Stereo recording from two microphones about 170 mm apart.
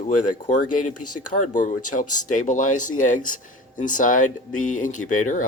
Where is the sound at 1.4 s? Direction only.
50° left (ahead or behind).